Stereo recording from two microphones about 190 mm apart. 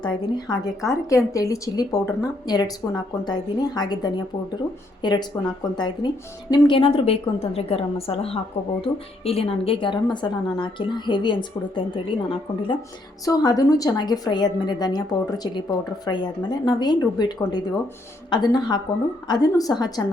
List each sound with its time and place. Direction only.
0.0 s a woman's voice: 20° left (ahead or behind)